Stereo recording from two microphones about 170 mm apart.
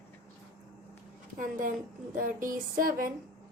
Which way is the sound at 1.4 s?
50° right (ahead or behind).